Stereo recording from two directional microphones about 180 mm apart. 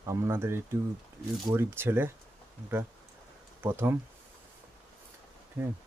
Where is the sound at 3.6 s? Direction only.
15° right (ahead or behind).